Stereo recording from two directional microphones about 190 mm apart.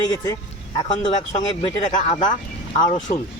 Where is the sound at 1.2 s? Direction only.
40° left (ahead or behind).